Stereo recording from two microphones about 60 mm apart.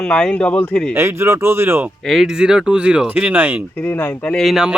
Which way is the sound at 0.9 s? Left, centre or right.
Right.